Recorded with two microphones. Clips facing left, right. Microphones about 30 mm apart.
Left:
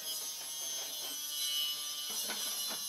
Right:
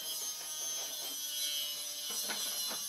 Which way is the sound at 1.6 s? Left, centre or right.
Centre.